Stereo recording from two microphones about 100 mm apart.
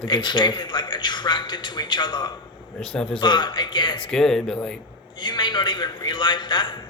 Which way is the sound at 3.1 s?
50° left (ahead or behind).